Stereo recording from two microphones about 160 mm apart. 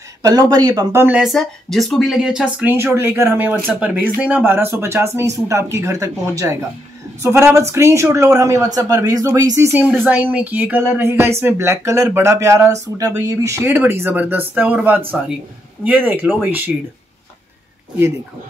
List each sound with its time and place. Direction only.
0.2 s speech: 25° right (ahead or behind)
1.0 s speech: 5° right (ahead or behind); by 6.5 s 20° right (ahead or behind)
7.5 s speech: 15° right (ahead or behind)